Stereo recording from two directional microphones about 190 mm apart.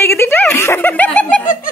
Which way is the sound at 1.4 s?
45° left (ahead or behind).